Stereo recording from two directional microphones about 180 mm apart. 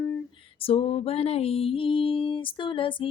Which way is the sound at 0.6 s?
30° left (ahead or behind).